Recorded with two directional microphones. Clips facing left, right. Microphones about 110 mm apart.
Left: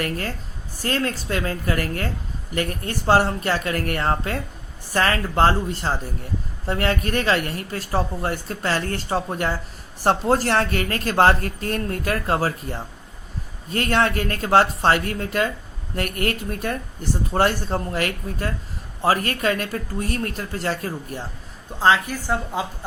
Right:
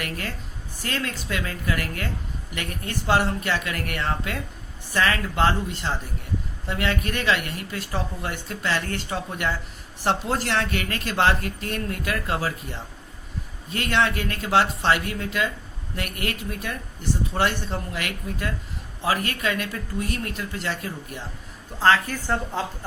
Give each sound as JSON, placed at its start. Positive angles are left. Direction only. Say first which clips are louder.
{"t": 0.0, "sound": "speech", "louder": "left 5 dB", "side_deg": 40}
{"t": 21.8, "sound": "a woman's voice", "louder": "left 1 dB", "side_deg": 15}